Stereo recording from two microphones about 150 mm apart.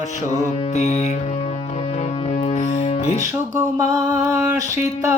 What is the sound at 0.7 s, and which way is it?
Music, 50° left (ahead or behind).